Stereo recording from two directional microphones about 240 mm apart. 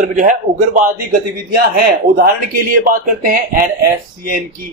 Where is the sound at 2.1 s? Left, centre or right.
Right.